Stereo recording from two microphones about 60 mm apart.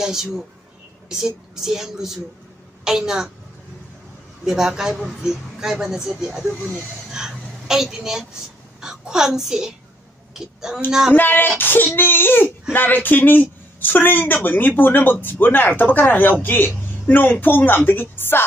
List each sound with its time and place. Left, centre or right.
0.0 s a woman's voice: centre
4.5 s speech: centre
7.1 s a sound: centre
8.8 s a child's voice: centre
11.1 s a woman's voice: left